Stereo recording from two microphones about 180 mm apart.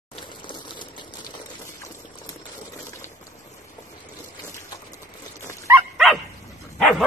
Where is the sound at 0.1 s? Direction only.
25° left (ahead or behind).